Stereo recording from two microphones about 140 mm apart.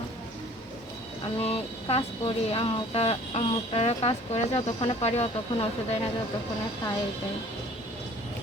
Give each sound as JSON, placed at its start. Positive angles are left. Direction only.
{"t": 1.4, "sound": "speech", "side_deg": 45}